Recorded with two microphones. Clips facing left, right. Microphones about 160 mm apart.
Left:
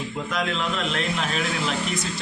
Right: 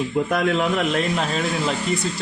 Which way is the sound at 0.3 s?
55° right (ahead or behind).